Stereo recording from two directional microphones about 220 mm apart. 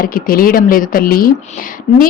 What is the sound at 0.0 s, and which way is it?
A woman's voice, 40° left (ahead or behind).